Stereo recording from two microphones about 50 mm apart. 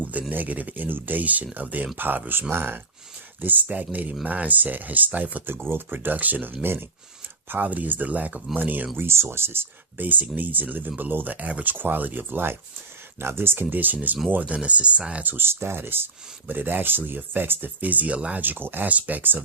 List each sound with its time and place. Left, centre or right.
0.0 s speech: right
2.5 s speech: right
3.4 s speech: right
5.5 s speech: right
9.0 s speech: right
10.3 s speech: right
14.5 s speech: right
15.2 s speech: right
18.9 s speech: right